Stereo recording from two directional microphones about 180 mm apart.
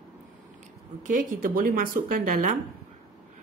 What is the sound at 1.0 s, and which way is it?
Speech, 45° right (ahead or behind).